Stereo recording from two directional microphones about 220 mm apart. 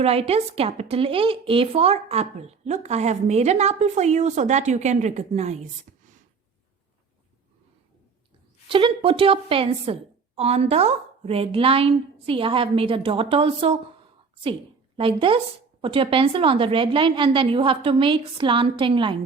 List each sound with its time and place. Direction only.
0.0 s a woman's voice: 25° right (ahead or behind)
8.6 s a woman's voice: 25° right (ahead or behind)
14.9 s a woman's voice: 25° right (ahead or behind)